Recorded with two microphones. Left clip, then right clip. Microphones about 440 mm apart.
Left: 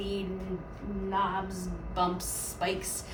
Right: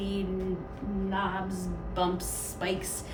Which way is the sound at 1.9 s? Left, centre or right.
Centre.